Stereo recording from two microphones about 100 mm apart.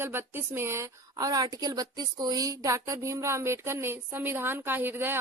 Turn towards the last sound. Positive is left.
turn(degrees=-20)  # may be behind; listen again after turning